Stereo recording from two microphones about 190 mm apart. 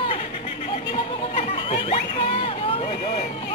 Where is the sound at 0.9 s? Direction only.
30° left (ahead or behind).